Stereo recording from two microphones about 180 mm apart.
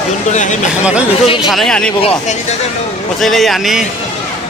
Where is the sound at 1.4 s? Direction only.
Centre (ahead or behind).